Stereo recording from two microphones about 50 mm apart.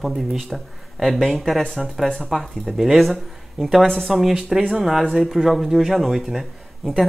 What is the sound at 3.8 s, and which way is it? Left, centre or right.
Speech, centre.